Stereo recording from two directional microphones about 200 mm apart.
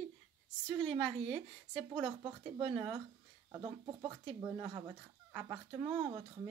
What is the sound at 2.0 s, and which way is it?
Speech, 25° right (ahead or behind).